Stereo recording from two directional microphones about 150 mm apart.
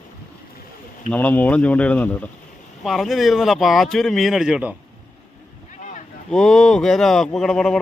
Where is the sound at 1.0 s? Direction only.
10° left (ahead or behind); by 4.7 s 5° right (ahead or behind).